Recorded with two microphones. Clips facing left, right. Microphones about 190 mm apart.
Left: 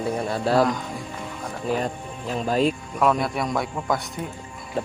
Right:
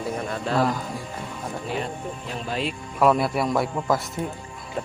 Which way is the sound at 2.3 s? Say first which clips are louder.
Left 8 dB; 40° left (ahead or behind).